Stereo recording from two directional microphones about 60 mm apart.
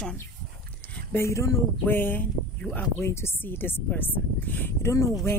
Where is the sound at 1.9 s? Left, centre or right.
Left.